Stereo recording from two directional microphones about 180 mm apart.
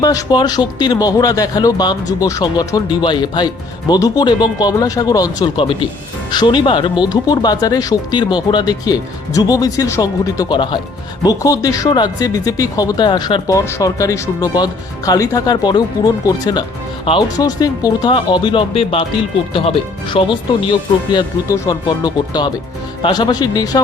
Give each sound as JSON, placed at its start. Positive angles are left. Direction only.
{"t": 0.0, "sound": "speech", "side_deg": 20}